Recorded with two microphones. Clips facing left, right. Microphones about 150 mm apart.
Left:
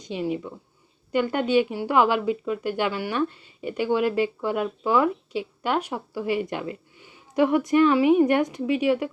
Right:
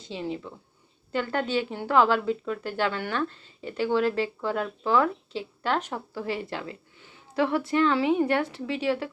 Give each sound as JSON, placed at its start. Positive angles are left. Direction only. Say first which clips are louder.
{"t": 0.0, "sound": "speech", "louder": "left 5 dB", "side_deg": 15}